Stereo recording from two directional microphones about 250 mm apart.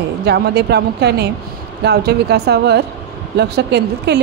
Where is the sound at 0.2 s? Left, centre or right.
Right.